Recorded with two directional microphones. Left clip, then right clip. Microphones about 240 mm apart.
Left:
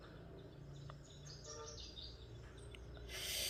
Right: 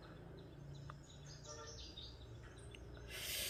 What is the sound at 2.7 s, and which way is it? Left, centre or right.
Owl, centre.